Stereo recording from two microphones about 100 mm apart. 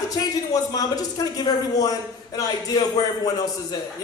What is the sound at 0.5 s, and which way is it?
A man's voice, 40° left (ahead or behind).